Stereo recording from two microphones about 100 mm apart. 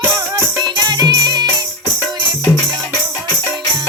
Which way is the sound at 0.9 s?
45° right (ahead or behind).